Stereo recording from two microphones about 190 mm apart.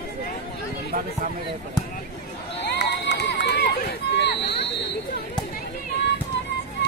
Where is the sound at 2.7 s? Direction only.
65° left (ahead or behind).